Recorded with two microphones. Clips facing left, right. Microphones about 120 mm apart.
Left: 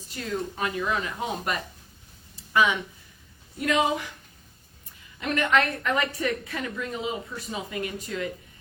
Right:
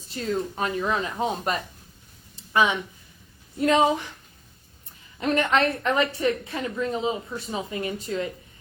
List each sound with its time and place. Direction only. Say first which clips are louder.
0.1 s speech: right 4 dB; 35° right (ahead or behind)
2.3 s a sound: right 1 dB; 30° right (ahead or behind)
3.6 s speech: right 4 dB; 30° right (ahead or behind)
5.2 s a woman's voice: right 2 dB; 30° right (ahead or behind)